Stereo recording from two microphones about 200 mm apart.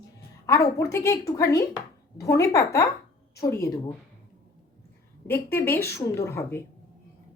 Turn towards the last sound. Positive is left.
turn(degrees=10)  # may be behind; listen again after turning